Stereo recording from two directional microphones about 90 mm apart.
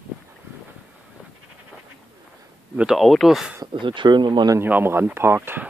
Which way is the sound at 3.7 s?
65° right (ahead or behind).